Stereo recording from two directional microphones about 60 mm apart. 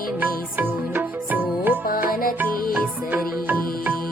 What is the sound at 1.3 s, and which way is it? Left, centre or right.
Music, right.